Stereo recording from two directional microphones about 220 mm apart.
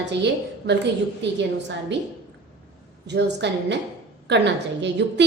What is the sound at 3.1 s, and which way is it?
A woman's voice, 50° right (ahead or behind).